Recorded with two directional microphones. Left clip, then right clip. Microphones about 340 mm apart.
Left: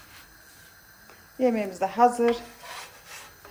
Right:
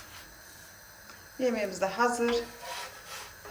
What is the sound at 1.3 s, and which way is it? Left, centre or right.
Speech, centre.